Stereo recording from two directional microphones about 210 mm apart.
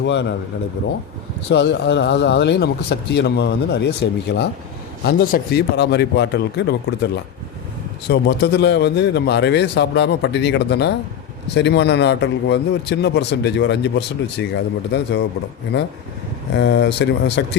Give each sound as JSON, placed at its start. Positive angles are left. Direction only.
{"t": 0.0, "sound": "speech", "side_deg": 55}
{"t": 1.5, "sound": "a man's voice", "side_deg": 55}
{"t": 16.6, "sound": "speech", "side_deg": 55}